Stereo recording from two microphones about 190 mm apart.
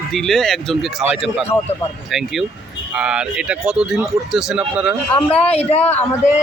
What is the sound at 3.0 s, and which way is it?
A man's voice, 5° right (ahead or behind).